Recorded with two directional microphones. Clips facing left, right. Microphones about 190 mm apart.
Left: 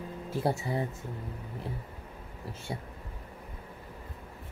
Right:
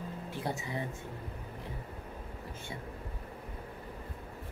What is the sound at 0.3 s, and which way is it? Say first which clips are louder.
Speech: left 8 dB; 35° left (ahead or behind).